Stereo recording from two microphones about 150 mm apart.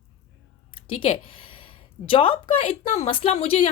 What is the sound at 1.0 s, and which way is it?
A woman's voice, 35° left (ahead or behind).